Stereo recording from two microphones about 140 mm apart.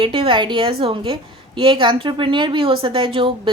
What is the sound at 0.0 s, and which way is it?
A woman's voice, 40° right (ahead or behind).